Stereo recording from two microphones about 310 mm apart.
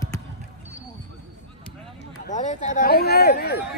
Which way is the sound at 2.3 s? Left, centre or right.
Left.